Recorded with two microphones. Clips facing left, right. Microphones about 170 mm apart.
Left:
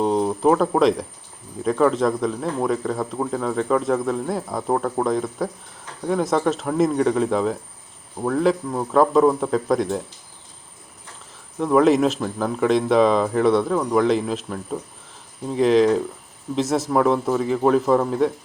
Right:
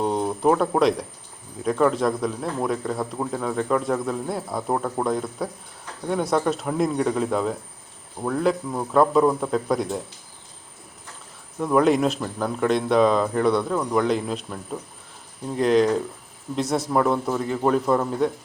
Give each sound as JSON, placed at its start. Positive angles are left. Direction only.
{"t": 0.0, "sound": "a man's voice", "side_deg": 0}
{"t": 11.6, "sound": "a man's voice", "side_deg": 0}